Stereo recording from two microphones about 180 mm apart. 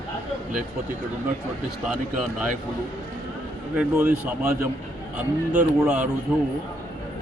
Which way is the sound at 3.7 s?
10° right (ahead or behind).